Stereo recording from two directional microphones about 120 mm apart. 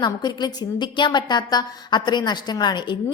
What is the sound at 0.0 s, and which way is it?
A woman's voice, 35° left (ahead or behind).